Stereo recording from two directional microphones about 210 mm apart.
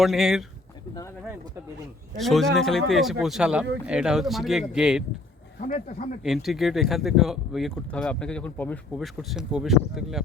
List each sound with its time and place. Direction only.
0.0 s speech: centre (ahead or behind)
2.1 s speech: centre (ahead or behind)
5.5 s speech: 35° left (ahead or behind)
6.2 s speech: centre (ahead or behind)